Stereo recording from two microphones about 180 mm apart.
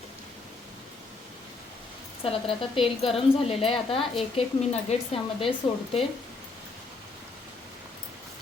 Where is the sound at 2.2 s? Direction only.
30° left (ahead or behind).